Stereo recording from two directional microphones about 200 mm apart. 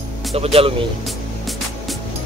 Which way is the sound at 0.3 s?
30° right (ahead or behind).